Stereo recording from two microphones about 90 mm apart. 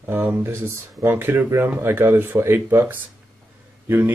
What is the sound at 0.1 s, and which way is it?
Speech, 20° right (ahead or behind).